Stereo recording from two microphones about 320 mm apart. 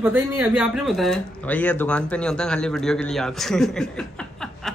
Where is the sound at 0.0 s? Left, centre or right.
Centre.